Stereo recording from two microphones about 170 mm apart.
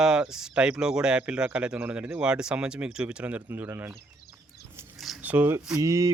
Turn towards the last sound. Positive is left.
turn(degrees=-20)  # may be behind; listen again after turning